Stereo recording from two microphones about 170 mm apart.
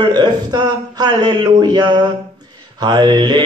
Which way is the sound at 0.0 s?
25° right (ahead or behind).